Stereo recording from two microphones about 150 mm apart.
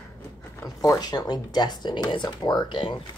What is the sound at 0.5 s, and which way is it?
Zipper, 20° left (ahead or behind).